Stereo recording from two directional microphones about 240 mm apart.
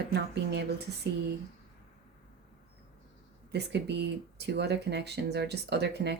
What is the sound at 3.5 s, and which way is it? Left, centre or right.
Speech, right.